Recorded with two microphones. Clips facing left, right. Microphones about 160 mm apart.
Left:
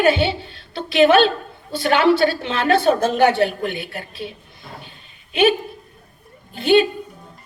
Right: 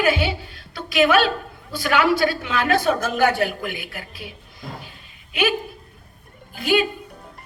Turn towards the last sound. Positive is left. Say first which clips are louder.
# left 5 dB
turn(degrees=30)  # may be behind; listen again after turning